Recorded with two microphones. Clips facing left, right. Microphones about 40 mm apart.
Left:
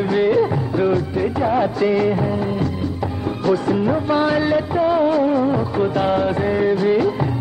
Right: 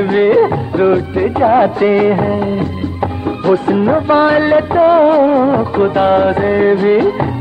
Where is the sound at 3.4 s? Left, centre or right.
Right.